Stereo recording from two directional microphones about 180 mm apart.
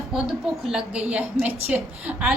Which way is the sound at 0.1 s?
5° right (ahead or behind).